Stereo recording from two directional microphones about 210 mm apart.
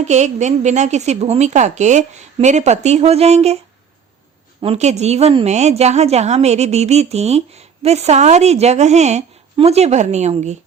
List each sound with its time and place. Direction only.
0.0 s a woman's voice: 35° right (ahead or behind)
4.6 s a woman's voice: 30° right (ahead or behind)